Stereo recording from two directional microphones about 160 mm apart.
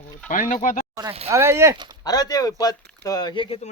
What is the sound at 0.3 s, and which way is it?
Speech, 55° left (ahead or behind).